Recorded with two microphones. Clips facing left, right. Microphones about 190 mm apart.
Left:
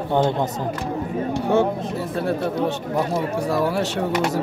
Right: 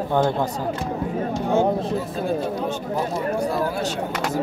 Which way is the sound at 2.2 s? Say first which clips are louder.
Left 3 dB; 70° left (ahead or behind).